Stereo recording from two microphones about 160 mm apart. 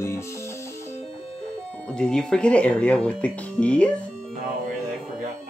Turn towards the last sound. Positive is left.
turn(degrees=5)  # may be behind; listen again after turning